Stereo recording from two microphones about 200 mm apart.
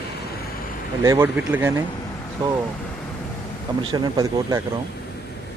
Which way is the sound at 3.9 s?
20° right (ahead or behind).